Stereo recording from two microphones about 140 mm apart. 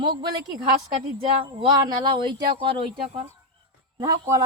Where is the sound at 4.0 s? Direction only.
25° right (ahead or behind).